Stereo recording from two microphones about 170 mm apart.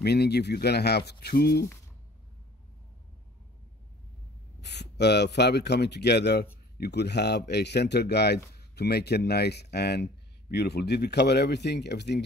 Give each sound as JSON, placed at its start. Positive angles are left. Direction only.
{"t": 0.0, "sound": "speech", "side_deg": 75}
{"t": 4.6, "sound": "a man's voice", "side_deg": 80}